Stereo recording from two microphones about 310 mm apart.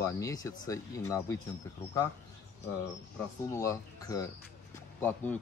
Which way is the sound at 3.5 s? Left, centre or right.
Centre.